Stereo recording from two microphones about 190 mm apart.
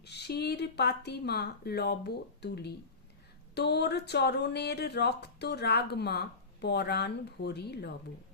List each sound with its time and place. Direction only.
0.0 s speech: 60° left (ahead or behind)